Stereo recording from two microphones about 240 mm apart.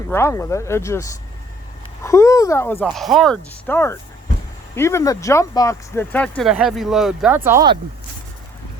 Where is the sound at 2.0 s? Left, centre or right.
Centre.